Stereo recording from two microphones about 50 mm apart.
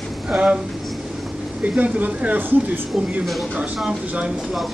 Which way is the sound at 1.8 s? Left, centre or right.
Right.